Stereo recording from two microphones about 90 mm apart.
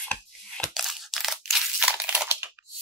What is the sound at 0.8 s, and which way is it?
Crunch, centre (ahead or behind).